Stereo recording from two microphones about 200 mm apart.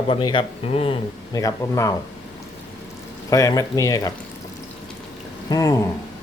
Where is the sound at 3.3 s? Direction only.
15° left (ahead or behind).